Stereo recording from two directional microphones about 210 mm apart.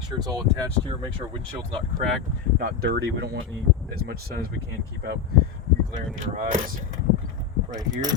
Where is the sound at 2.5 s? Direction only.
50° right (ahead or behind).